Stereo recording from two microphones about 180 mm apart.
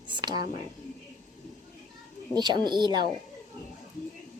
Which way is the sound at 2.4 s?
25° right (ahead or behind).